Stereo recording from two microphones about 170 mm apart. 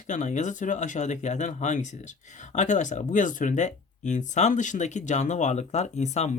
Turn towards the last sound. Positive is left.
turn(degrees=40)  # may be behind; listen again after turning